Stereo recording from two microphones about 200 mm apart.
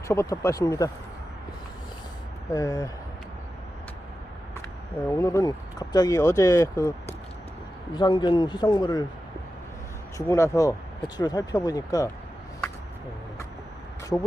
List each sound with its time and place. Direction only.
0.1 s speech: 15° left (ahead or behind)
2.5 s speech: 20° left (ahead or behind)
5.0 s speech: 15° left (ahead or behind)
7.9 s a man's voice: 20° left (ahead or behind)
10.2 s a man's voice: 15° left (ahead or behind)
14.1 s speech: 10° left (ahead or behind)